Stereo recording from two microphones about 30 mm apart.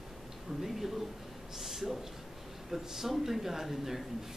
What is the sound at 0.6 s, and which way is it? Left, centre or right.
A man's voice, centre.